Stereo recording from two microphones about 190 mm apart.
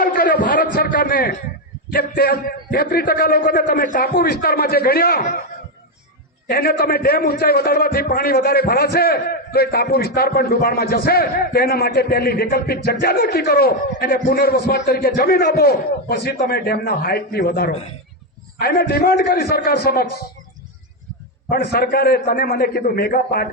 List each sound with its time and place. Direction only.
0.0 s a sound: 50° left (ahead or behind)
1.9 s a man's voice: 55° left (ahead or behind)
6.5 s a man's voice: 50° left (ahead or behind)
21.5 s a man's voice: 55° left (ahead or behind)